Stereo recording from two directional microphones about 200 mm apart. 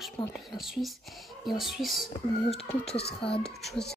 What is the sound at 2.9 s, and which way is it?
Speech, 30° left (ahead or behind).